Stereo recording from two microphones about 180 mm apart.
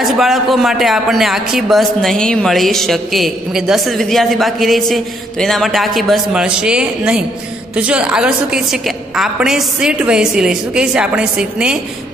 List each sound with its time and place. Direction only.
0.0 s speech: centre (ahead or behind)